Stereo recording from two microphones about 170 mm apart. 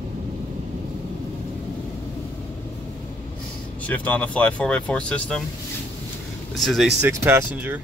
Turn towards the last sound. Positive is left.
turn(degrees=-15)  # may be behind; listen again after turning